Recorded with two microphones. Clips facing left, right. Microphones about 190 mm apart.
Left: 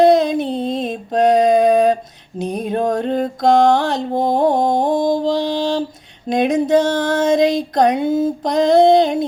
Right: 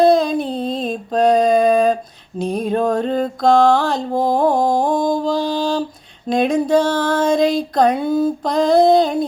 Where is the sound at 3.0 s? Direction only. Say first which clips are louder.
Even; 50° left (ahead or behind).